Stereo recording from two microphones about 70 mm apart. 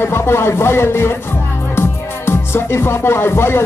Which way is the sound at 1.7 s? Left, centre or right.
Left.